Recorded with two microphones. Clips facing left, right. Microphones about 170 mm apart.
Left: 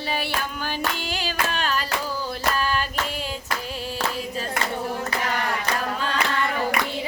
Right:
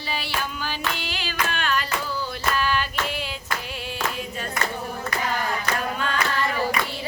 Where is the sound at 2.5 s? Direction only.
40° left (ahead or behind).